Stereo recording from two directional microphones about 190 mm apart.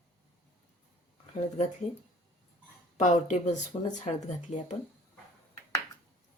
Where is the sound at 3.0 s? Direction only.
40° left (ahead or behind).